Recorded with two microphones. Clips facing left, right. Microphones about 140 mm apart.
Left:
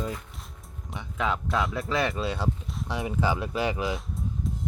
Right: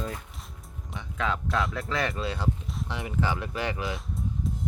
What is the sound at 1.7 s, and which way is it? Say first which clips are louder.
Speech: left 2 dB; 15° left (ahead or behind).